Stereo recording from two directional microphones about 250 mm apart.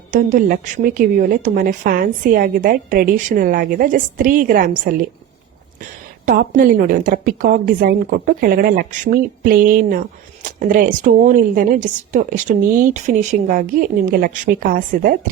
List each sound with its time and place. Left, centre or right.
0.1 s a woman's voice: right